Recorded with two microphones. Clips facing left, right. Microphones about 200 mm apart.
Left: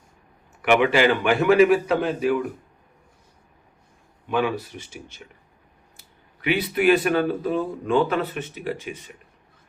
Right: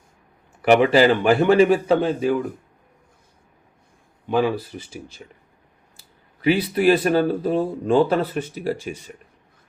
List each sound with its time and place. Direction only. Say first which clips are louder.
0.6 s speech: right 4 dB; 35° right (ahead or behind)
4.3 s speech: right 3 dB; 30° right (ahead or behind)